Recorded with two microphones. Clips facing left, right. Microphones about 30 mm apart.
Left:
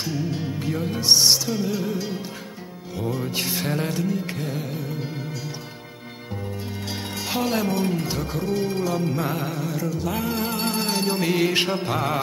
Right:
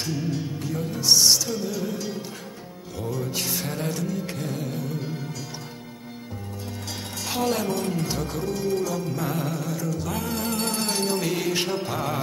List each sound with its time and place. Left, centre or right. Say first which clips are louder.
0.0 s music: left 1 dB; left
7.2 s speech: left 1 dB; centre
7.8 s music: left 2 dB; centre